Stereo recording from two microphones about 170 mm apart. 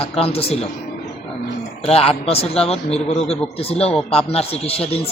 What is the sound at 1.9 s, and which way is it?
A man's voice, 35° left (ahead or behind).